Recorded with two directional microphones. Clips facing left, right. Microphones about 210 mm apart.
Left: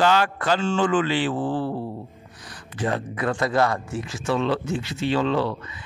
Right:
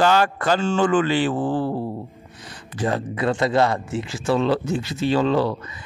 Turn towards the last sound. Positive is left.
turn(degrees=-40)  # may be behind; listen again after turning